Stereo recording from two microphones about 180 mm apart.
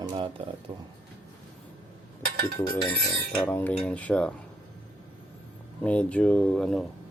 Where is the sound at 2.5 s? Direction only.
15° left (ahead or behind).